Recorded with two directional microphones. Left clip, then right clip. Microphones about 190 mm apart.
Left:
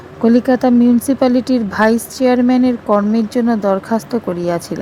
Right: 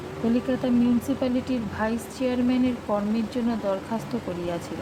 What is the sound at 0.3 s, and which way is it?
A woman's voice, 45° left (ahead or behind).